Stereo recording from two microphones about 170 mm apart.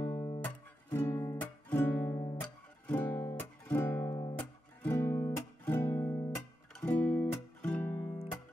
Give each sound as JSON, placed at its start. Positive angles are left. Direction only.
{"t": 0.0, "sound": "music", "side_deg": 25}
{"t": 0.4, "sound": "music", "side_deg": 15}